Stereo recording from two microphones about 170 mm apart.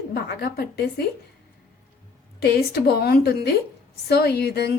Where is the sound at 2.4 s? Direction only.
70° left (ahead or behind).